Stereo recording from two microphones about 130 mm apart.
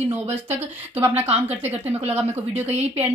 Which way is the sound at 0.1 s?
15° right (ahead or behind).